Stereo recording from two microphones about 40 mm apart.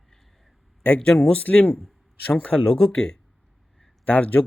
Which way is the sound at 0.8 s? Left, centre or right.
Left.